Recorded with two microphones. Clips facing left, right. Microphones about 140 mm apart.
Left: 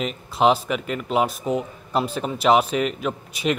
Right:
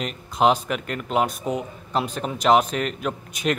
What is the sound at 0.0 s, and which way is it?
A man's voice, centre (ahead or behind).